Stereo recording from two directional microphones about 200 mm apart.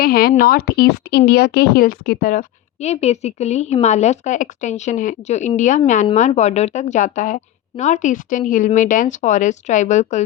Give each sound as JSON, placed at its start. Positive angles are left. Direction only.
{"t": 0.0, "sound": "speech", "side_deg": 50}